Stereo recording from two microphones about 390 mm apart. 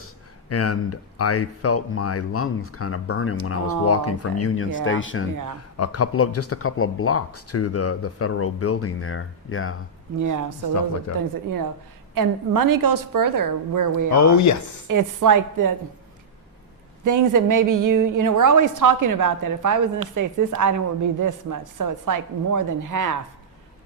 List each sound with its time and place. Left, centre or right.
0.5 s speech: left
10.2 s a woman's voice: right
11.1 s speech: left
12.1 s a woman's voice: right
14.2 s speech: left
14.8 s a woman's voice: right
17.0 s a woman's voice: right